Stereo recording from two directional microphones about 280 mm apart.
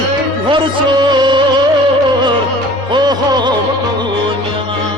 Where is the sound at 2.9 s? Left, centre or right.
Centre.